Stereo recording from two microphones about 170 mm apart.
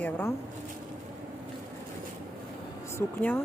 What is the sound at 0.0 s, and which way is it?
Speech, 10° left (ahead or behind).